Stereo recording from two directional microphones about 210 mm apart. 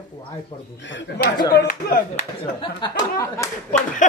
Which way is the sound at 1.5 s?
45° left (ahead or behind).